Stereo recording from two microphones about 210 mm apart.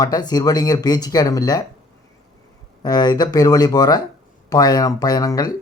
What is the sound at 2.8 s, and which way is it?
Speech, 20° left (ahead or behind).